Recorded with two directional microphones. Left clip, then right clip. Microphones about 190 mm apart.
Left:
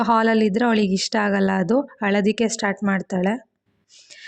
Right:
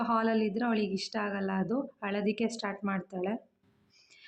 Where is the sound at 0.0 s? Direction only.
40° left (ahead or behind).